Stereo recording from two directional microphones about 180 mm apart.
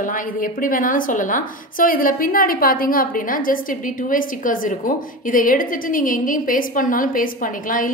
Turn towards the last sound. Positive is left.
turn(degrees=50)  # may be behind; listen again after turning